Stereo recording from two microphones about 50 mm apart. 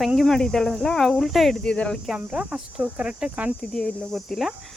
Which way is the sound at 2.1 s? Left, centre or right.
Centre.